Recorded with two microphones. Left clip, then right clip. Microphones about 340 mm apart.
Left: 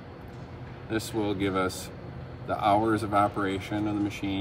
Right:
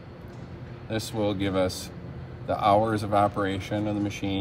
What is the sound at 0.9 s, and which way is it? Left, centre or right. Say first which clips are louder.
Speech: right 1 dB; right.